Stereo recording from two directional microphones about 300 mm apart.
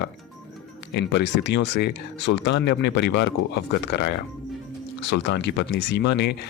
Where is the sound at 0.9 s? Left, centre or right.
Left.